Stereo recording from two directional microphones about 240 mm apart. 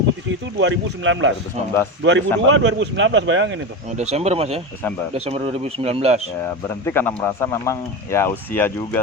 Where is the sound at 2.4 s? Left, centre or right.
Right.